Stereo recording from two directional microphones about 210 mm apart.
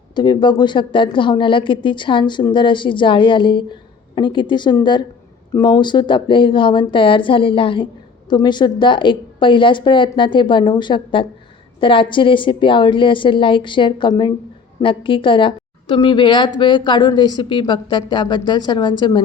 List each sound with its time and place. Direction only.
0.1 s a woman's voice: 20° left (ahead or behind)